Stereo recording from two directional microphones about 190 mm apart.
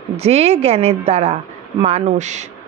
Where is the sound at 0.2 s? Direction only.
35° right (ahead or behind).